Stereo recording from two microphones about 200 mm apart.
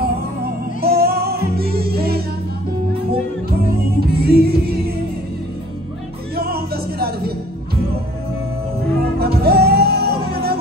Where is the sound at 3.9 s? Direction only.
50° right (ahead or behind).